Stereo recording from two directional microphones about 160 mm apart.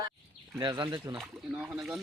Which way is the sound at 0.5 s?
25° right (ahead or behind).